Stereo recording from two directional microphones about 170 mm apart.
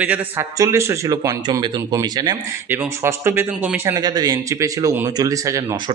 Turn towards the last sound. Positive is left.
turn(degrees=-20)  # may be behind; listen again after turning